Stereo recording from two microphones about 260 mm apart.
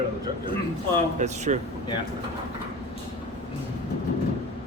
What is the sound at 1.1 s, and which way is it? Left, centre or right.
Speech, right.